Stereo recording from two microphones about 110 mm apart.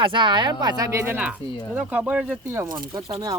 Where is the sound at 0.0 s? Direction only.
50° right (ahead or behind).